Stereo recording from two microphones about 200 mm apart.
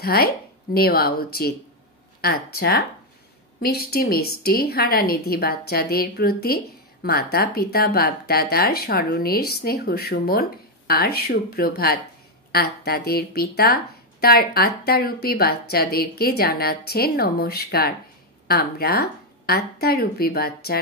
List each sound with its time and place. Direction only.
0.0 s a woman's voice: 50° left (ahead or behind)